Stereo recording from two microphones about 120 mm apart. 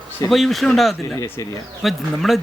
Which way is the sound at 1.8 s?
Centre (ahead or behind).